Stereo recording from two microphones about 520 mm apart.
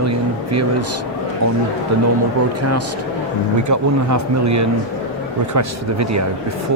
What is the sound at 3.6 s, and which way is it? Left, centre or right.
Speech, right.